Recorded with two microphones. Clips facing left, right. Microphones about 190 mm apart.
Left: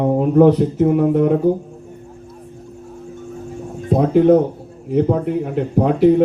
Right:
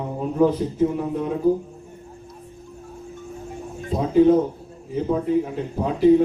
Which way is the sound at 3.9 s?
70° left (ahead or behind).